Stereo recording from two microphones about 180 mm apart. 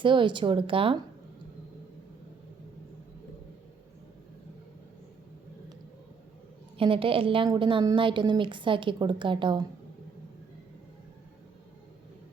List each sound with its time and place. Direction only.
0.0 s a woman's voice: 25° right (ahead or behind)
6.7 s a woman's voice: 30° right (ahead or behind)